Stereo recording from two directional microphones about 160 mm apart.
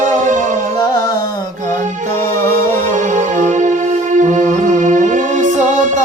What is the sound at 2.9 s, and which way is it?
Music, 50° right (ahead or behind).